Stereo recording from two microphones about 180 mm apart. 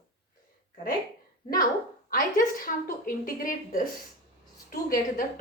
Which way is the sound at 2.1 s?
50° left (ahead or behind).